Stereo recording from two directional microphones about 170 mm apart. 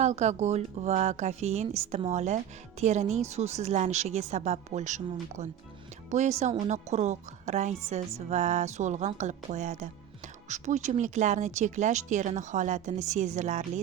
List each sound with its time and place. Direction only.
0.0 s a woman's voice: 45° right (ahead or behind)
6.1 s a woman's voice: 45° right (ahead or behind)